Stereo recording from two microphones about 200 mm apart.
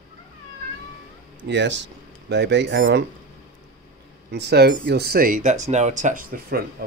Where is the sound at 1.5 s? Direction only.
60° right (ahead or behind).